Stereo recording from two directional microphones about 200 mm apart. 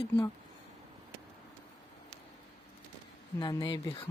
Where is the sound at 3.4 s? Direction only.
20° left (ahead or behind).